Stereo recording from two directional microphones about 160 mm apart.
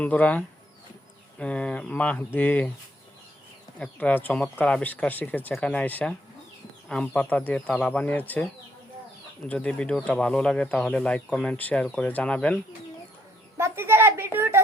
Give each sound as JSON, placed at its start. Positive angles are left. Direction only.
{"t": 0.0, "sound": "speech", "side_deg": 10}
{"t": 3.8, "sound": "speech", "side_deg": 10}
{"t": 9.5, "sound": "speech", "side_deg": 5}
{"t": 13.6, "sound": "a sound", "side_deg": -15}